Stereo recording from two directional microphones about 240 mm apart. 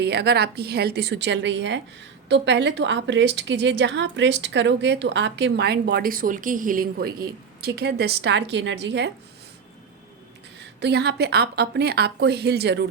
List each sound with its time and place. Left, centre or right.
0.0 s a woman's voice: right
10.8 s a woman's voice: right